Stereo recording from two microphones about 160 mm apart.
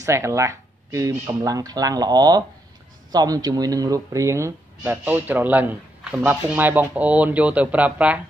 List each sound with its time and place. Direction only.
0.0 s speech: 20° right (ahead or behind)